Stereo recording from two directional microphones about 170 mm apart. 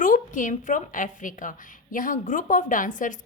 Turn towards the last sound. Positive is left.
turn(degrees=50)  # may be behind; listen again after turning